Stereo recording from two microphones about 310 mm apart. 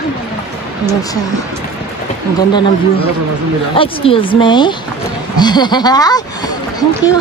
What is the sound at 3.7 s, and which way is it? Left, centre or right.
Speech, centre.